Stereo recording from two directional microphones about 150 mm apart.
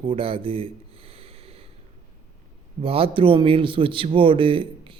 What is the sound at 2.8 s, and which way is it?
A man's voice, 40° right (ahead or behind).